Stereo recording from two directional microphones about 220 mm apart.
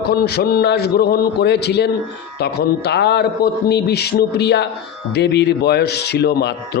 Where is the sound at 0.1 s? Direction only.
45° left (ahead or behind).